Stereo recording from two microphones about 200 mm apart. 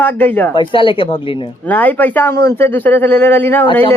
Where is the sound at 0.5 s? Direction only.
25° left (ahead or behind).